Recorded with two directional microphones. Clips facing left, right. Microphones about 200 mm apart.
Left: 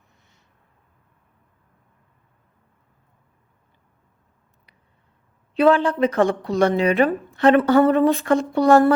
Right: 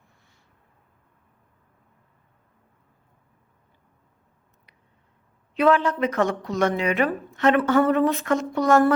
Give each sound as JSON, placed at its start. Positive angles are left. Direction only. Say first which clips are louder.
{"t": 5.5, "sound": "speech", "louder": "left 3 dB", "side_deg": 30}